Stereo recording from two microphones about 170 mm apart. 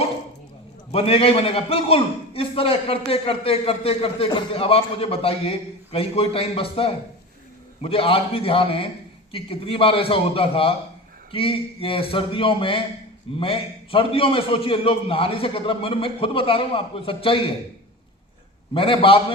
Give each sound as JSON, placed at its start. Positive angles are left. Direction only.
{"t": 0.9, "sound": "a man's voice", "side_deg": 35}
{"t": 18.7, "sound": "a man's voice", "side_deg": 30}